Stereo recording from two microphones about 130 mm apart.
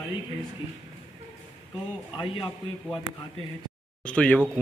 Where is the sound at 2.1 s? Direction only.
40° left (ahead or behind).